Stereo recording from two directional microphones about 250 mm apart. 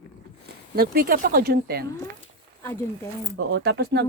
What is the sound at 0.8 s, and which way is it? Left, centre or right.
A man's voice, right.